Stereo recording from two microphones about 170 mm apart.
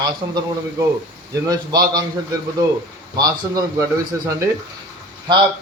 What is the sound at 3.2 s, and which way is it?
Speech, 20° right (ahead or behind).